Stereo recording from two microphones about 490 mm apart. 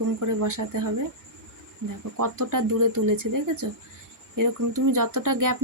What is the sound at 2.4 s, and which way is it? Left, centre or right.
Speech, right.